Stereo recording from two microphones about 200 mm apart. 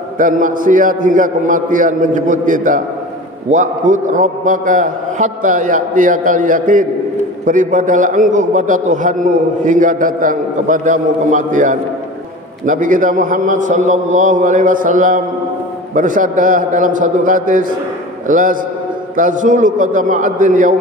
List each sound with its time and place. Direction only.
0.2 s a man's voice: 40° right (ahead or behind)